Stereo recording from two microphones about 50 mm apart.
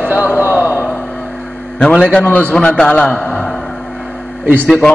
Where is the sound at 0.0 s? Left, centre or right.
Right.